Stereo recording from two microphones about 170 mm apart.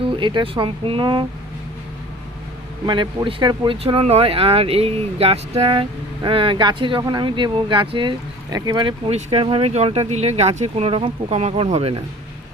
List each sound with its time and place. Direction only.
0.0 s speech: 30° right (ahead or behind)
2.8 s speech: 25° right (ahead or behind)